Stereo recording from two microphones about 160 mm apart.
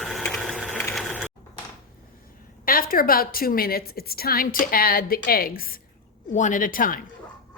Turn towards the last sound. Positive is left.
turn(degrees=60)  # may be behind; listen again after turning